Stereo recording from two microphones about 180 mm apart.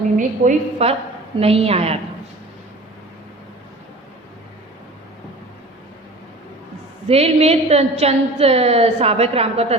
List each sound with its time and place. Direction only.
0.2 s a woman's voice: 40° right (ahead or behind)
7.1 s a woman's voice: 35° right (ahead or behind)